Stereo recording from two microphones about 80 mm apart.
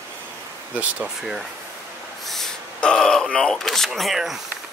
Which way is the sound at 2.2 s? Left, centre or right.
Centre.